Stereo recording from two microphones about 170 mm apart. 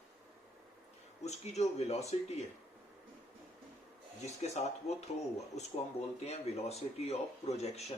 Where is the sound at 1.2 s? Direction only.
40° left (ahead or behind).